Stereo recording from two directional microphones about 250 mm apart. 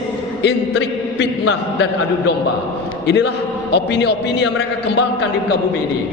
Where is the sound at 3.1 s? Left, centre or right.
Left.